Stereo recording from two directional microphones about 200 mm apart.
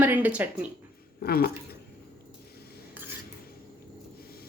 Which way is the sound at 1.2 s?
50° left (ahead or behind).